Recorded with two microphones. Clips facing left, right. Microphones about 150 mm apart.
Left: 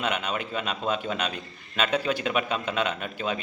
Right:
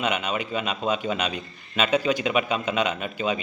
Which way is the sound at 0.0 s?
5° right (ahead or behind).